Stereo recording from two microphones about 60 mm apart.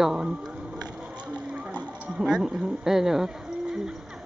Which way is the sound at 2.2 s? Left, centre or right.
Centre.